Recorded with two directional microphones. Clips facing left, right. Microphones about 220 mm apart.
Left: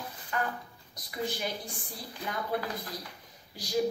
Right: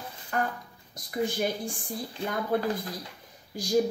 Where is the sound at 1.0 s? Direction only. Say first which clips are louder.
Right 6 dB; 50° right (ahead or behind).